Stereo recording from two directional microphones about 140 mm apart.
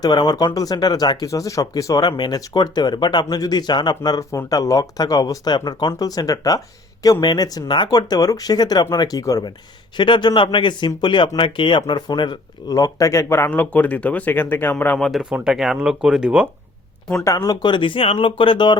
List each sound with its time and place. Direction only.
0.0 s speech: 30° left (ahead or behind); by 14.9 s 15° left (ahead or behind)
14.9 s speech: centre (ahead or behind)
17.2 s speech: 25° left (ahead or behind)